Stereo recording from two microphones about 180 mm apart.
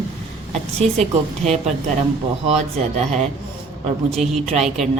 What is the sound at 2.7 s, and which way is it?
Speech, 35° right (ahead or behind).